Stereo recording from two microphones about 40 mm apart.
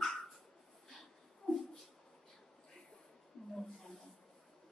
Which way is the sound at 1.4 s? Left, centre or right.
Centre.